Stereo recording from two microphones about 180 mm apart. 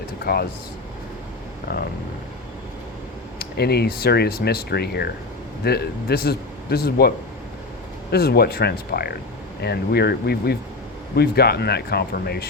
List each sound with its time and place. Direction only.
0.3 s speech: 60° left (ahead or behind)
1.7 s speech: 65° left (ahead or behind)
3.3 s speech: 65° left (ahead or behind)
8.1 s speech: 60° left (ahead or behind)